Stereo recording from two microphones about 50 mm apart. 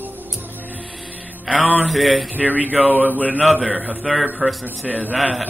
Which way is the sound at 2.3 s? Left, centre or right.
Right.